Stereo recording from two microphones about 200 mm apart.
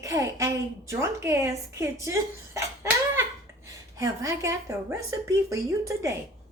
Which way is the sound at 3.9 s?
15° right (ahead or behind).